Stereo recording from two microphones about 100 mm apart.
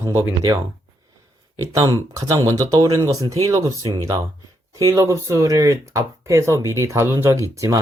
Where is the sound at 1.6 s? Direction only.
35° right (ahead or behind).